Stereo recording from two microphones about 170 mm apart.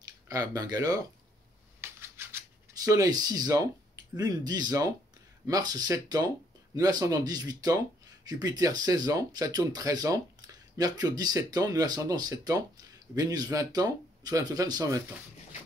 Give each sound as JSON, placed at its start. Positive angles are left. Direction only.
{"t": 0.0, "sound": "speech", "side_deg": -20}
{"t": 1.8, "sound": "scissors", "side_deg": -15}
{"t": 4.2, "sound": "speech", "side_deg": -20}